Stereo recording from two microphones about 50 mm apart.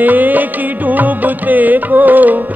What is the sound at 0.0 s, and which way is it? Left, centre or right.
Music, right.